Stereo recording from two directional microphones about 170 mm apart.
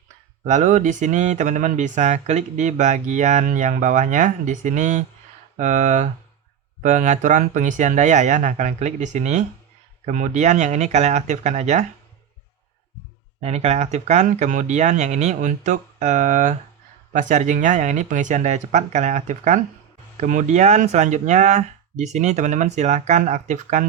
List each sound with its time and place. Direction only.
0.4 s speech: 45° right (ahead or behind)
13.4 s speech: 40° right (ahead or behind)